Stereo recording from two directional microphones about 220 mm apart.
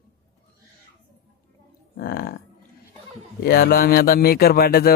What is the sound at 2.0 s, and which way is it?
Speech, 45° left (ahead or behind).